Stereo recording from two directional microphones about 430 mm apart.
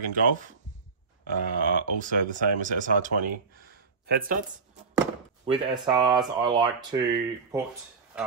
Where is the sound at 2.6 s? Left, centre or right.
Centre.